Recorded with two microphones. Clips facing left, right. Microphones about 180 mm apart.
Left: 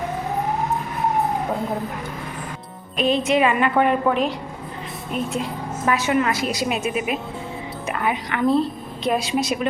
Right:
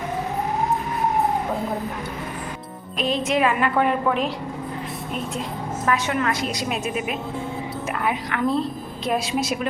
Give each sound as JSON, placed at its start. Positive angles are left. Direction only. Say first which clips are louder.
{"t": 3.0, "sound": "a woman's voice", "louder": "left 3 dB", "side_deg": 0}
{"t": 5.3, "sound": "a woman's voice", "louder": "left 2 dB", "side_deg": 5}